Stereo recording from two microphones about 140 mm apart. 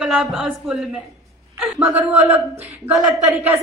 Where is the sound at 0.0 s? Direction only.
5° right (ahead or behind).